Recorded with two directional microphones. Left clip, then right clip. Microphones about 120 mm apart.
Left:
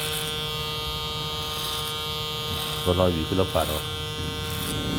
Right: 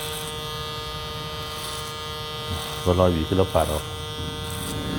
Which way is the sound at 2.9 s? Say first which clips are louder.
Right 3 dB; 25° right (ahead or behind).